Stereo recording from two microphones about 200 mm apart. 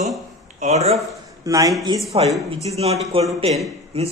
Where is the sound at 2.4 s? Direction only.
30° right (ahead or behind).